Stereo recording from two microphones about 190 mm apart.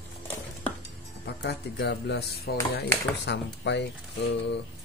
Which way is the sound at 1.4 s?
60° left (ahead or behind).